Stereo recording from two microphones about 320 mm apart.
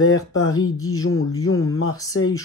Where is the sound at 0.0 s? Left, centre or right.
Left.